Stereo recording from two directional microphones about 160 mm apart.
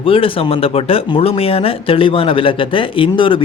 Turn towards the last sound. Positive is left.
turn(degrees=30)  # may be behind; listen again after turning